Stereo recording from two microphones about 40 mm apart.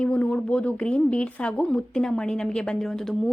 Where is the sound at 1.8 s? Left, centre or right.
Centre.